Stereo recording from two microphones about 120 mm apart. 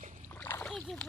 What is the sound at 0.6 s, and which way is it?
Splash, 5° left (ahead or behind).